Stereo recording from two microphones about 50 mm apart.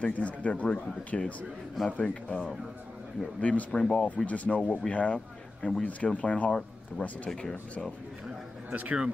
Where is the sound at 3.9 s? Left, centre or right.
Centre.